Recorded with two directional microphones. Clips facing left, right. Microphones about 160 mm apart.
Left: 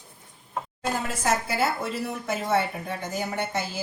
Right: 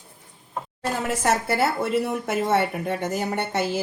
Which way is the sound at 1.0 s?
65° right (ahead or behind).